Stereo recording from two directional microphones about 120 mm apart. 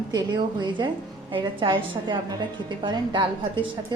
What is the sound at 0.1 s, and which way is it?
A woman's voice, 35° right (ahead or behind).